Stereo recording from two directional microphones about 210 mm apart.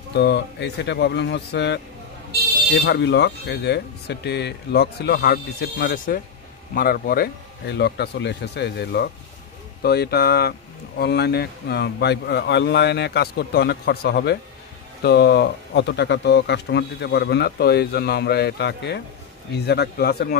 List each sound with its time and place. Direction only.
0.1 s speech: 55° left (ahead or behind)